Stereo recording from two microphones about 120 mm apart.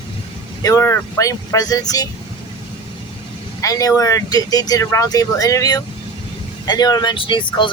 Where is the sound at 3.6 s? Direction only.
30° left (ahead or behind).